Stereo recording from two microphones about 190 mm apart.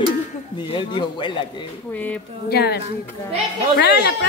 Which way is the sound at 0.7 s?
25° left (ahead or behind).